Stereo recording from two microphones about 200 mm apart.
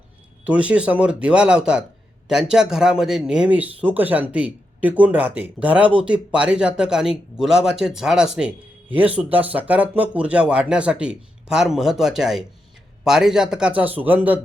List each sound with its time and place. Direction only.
0.4 s speech: 5° right (ahead or behind)